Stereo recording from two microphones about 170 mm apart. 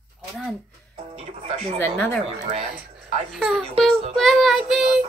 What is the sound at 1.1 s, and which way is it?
Speech, 35° right (ahead or behind).